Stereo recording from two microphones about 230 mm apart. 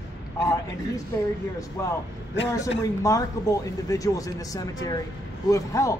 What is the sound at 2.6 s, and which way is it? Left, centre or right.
A man's voice, centre.